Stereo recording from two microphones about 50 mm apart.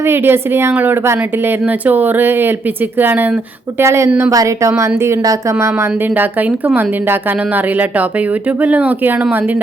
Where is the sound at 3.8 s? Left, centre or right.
Right.